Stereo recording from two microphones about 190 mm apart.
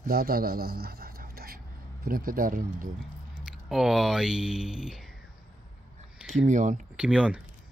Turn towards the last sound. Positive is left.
turn(degrees=-5)  # may be behind; listen again after turning